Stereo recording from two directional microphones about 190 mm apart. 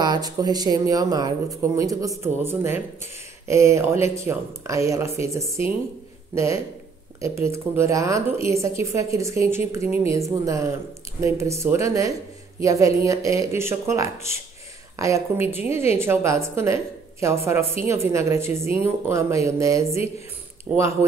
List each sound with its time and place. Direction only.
0.0 s a woman's voice: 20° right (ahead or behind)